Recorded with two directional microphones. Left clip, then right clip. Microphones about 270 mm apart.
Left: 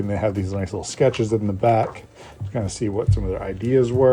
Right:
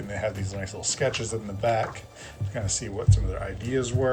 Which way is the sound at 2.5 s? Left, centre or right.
Left.